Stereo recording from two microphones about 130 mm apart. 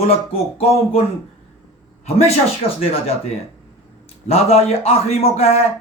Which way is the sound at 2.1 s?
50° left (ahead or behind).